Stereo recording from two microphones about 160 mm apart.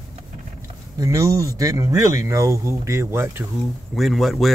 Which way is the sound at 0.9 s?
20° right (ahead or behind).